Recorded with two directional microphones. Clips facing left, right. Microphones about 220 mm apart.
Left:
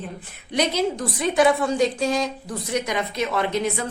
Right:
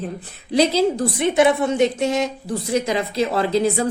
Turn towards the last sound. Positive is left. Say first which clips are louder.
# right 5 dB
turn(degrees=-30)  # may be behind; listen again after turning